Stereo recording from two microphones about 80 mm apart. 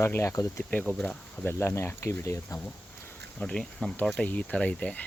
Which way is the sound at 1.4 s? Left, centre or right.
Left.